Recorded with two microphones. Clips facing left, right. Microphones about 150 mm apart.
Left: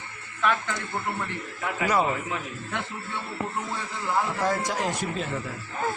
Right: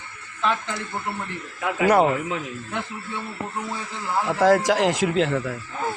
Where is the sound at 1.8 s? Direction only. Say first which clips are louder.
Right 7 dB; 60° right (ahead or behind).